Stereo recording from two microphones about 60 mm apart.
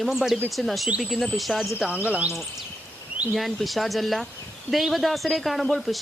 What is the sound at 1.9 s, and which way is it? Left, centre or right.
Speech, right.